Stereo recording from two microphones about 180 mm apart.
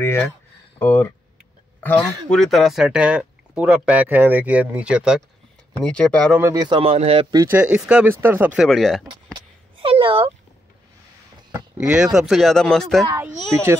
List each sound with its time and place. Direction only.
0.0 s speech: 15° left (ahead or behind); by 5.2 s 5° right (ahead or behind)
5.8 s speech: 5° left (ahead or behind)
6.3 s speech: 15° right (ahead or behind)
6.7 s a man's voice: 35° right (ahead or behind)
7.3 s speech: 10° right (ahead or behind)
8.6 s speech: centre (ahead or behind)
9.0 s a sound: 30° right (ahead or behind)
11.8 s speech: 5° right (ahead or behind)
13.0 s speech: 15° right (ahead or behind)